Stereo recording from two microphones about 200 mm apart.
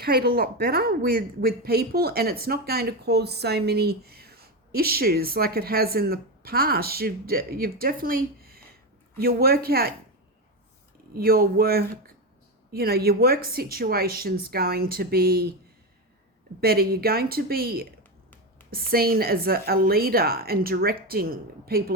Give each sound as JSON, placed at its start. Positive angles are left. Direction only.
{"t": 0.0, "sound": "a woman's voice", "side_deg": -50}
{"t": 11.1, "sound": "a woman's voice", "side_deg": -50}
{"t": 16.6, "sound": "a woman's voice", "side_deg": -50}